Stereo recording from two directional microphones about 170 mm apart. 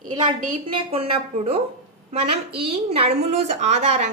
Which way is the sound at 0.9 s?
35° right (ahead or behind).